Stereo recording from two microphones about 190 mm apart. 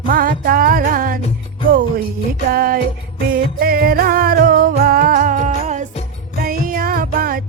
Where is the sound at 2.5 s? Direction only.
50° right (ahead or behind).